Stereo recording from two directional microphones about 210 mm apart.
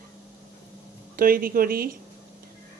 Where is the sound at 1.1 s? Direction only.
45° right (ahead or behind).